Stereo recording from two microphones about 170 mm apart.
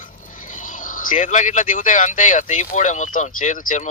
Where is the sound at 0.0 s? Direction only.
50° left (ahead or behind).